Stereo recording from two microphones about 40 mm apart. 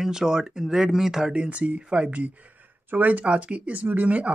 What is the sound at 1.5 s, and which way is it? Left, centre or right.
Speech, right.